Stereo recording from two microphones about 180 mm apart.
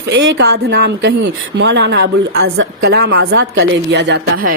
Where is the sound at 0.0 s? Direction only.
75° right (ahead or behind).